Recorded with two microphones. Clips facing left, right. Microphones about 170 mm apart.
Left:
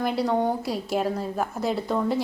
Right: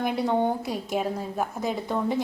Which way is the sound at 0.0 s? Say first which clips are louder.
Left 1 dB; centre (ahead or behind).